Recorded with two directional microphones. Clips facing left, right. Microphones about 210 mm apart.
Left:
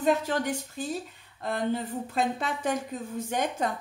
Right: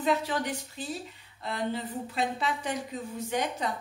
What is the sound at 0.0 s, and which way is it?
A woman's voice, 45° left (ahead or behind).